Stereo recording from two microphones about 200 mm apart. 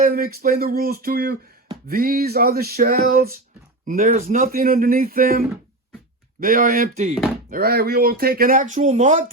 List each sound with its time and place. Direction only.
0.0 s speech: 45° right (ahead or behind)
6.4 s speech: 45° right (ahead or behind)
7.5 s speech: 50° right (ahead or behind)